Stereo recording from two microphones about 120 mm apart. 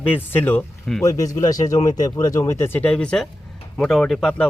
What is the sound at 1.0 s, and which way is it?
Speech, 25° left (ahead or behind).